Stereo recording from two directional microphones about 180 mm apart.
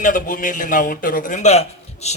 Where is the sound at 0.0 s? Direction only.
50° left (ahead or behind).